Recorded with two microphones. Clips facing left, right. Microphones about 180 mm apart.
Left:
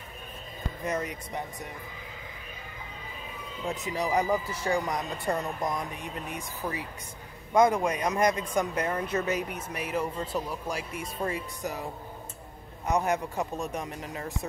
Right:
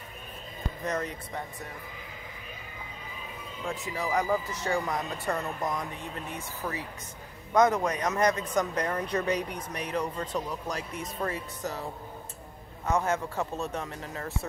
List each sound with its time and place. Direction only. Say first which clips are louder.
0.8 s speech: left 1 dB; 10° left (ahead or behind)
3.6 s speech: left 2 dB; 20° left (ahead or behind)